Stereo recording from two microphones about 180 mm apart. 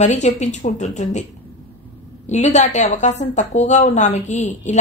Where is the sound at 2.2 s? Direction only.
40° left (ahead or behind).